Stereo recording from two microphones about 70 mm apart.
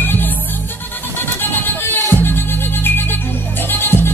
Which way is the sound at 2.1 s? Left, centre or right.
Left.